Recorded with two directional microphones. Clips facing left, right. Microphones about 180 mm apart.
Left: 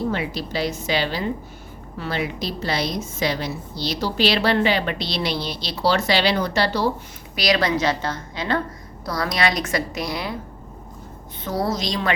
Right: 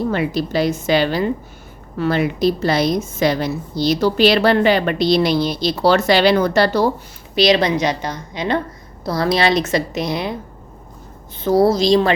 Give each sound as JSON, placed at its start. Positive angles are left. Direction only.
{"t": 0.1, "sound": "a woman's voice", "side_deg": -50}
{"t": 7.3, "sound": "a woman's voice", "side_deg": -25}
{"t": 11.4, "sound": "a woman's voice", "side_deg": -30}